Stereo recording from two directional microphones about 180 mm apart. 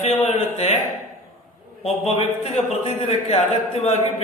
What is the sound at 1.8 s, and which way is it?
A man's voice, 35° left (ahead or behind).